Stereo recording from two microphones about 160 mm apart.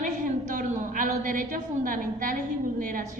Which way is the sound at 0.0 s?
55° right (ahead or behind).